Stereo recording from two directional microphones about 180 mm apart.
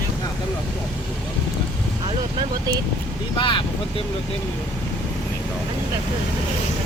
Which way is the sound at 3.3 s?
25° left (ahead or behind).